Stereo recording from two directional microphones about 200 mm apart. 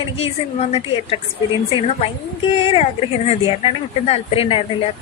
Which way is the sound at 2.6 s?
30° left (ahead or behind).